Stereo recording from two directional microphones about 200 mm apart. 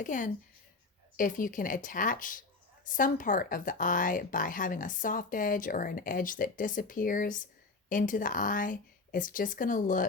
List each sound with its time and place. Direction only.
0.0 s a woman's voice: 40° left (ahead or behind)